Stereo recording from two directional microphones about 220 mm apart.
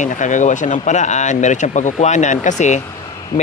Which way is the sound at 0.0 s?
35° left (ahead or behind).